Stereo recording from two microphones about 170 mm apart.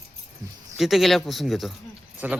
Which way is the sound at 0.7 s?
Centre (ahead or behind).